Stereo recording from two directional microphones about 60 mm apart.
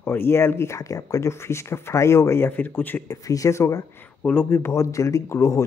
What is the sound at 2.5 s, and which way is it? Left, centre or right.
Speech, left.